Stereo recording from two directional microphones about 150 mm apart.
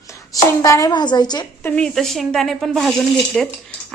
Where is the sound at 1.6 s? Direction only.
10° left (ahead or behind).